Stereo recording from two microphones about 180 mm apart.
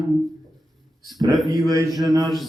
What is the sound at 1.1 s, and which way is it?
Mantra, 20° right (ahead or behind).